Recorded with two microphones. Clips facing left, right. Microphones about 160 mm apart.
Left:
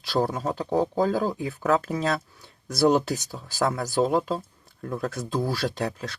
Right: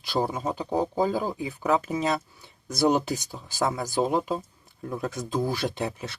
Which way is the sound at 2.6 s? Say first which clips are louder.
Left 2 dB; 20° right (ahead or behind).